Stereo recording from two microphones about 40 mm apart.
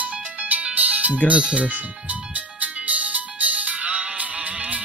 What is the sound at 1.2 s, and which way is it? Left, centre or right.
Speech, right.